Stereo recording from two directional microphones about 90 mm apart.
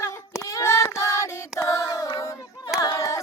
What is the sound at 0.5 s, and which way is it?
Child singing, 30° left (ahead or behind).